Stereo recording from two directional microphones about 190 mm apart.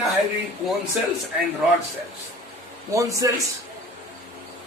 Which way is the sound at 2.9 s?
15° right (ahead or behind).